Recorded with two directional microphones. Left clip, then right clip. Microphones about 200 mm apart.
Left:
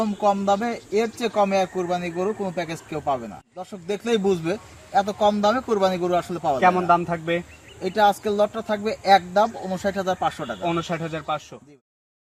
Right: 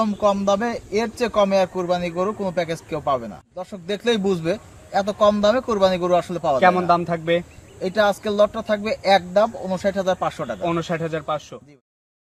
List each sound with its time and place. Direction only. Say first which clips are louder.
0.5 s speech: right 1 dB; 20° right (ahead or behind)
6.6 s a man's voice: right 1 dB; centre (ahead or behind)
7.8 s speech: even; 20° right (ahead or behind)
10.6 s a man's voice: right 2 dB; centre (ahead or behind)